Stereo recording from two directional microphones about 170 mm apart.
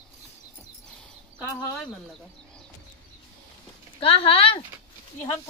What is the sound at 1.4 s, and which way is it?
Speech, 5° left (ahead or behind).